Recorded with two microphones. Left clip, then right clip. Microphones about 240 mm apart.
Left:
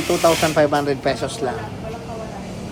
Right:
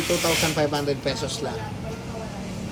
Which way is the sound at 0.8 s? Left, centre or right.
Centre.